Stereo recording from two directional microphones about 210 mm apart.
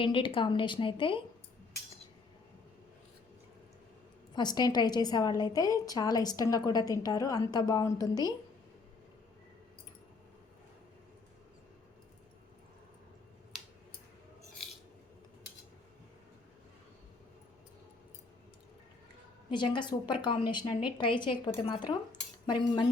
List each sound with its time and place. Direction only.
0.0 s speech: 25° left (ahead or behind)
4.4 s a woman's voice: 20° left (ahead or behind)
19.5 s speech: 20° left (ahead or behind)